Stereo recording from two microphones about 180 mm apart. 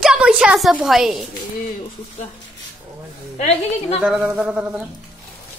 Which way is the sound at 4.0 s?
5° right (ahead or behind).